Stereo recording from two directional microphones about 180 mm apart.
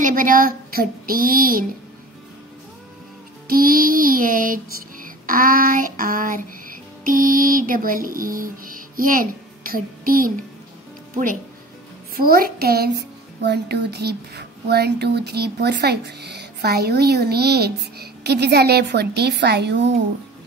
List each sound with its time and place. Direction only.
0.0 s speech: 50° right (ahead or behind)
3.4 s speech: 55° right (ahead or behind)
5.0 s child singing: 50° right (ahead or behind)
7.1 s music: 50° right (ahead or behind)
12.2 s speech: 55° right (ahead or behind); by 19.9 s 70° right (ahead or behind)